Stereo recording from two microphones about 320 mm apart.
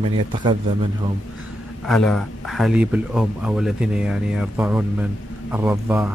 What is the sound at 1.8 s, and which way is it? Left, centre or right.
A man's voice, centre.